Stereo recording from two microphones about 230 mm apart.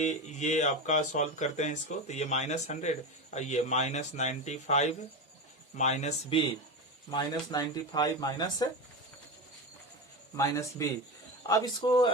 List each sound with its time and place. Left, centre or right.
0.0 s speech: left
7.1 s speech: centre
10.3 s speech: centre